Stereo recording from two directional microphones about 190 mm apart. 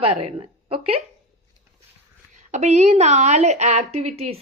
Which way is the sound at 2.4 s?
40° right (ahead or behind).